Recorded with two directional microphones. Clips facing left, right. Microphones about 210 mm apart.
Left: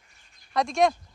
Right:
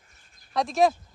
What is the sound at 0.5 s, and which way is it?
Speech, centre (ahead or behind).